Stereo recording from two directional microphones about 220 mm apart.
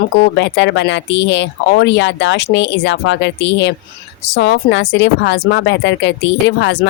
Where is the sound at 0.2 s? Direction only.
55° left (ahead or behind).